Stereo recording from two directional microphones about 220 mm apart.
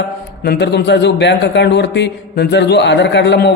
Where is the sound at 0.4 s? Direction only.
50° left (ahead or behind).